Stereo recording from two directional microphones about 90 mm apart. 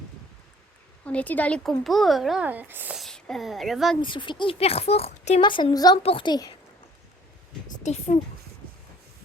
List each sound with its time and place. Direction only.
1.0 s speech: 15° left (ahead or behind)
1.8 s a child's voice: centre (ahead or behind)
2.4 s speech: 20° right (ahead or behind)
3.1 s a woman's voice: 5° left (ahead or behind)
4.0 s speech: 65° left (ahead or behind); by 5.1 s 90° left
5.4 s a woman's voice: 70° left (ahead or behind)
5.7 s a woman's voice: 45° left (ahead or behind)
6.0 s a child's voice: 90° left
6.2 s a woman's voice: 50° left (ahead or behind)